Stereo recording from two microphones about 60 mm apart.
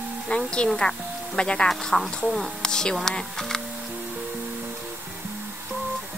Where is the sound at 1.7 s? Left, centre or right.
Centre.